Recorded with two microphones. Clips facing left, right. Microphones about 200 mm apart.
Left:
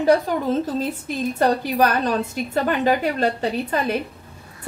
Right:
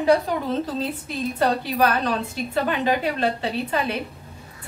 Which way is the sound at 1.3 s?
40° left (ahead or behind).